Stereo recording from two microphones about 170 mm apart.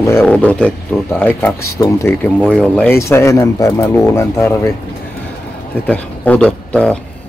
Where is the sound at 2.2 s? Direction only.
5° left (ahead or behind).